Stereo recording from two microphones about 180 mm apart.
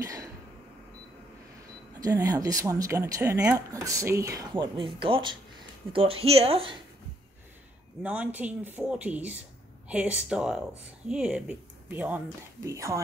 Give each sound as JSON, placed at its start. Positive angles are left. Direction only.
{"t": 0.0, "sound": "a sound", "side_deg": -20}
{"t": 2.0, "sound": "a woman's voice", "side_deg": -20}
{"t": 8.0, "sound": "speech", "side_deg": -5}